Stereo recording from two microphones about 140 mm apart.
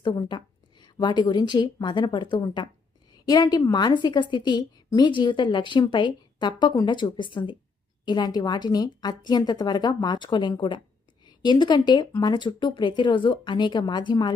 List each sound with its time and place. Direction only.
0.0 s a woman's voice: 35° left (ahead or behind)